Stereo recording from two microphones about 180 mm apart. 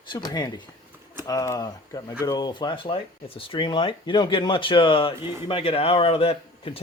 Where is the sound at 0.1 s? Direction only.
20° left (ahead or behind).